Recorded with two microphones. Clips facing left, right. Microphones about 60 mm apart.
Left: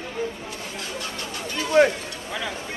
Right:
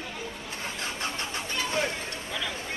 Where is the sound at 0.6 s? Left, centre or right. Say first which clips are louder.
Right 1 dB; right.